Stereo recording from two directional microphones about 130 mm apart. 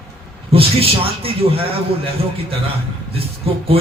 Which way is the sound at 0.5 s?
45° right (ahead or behind).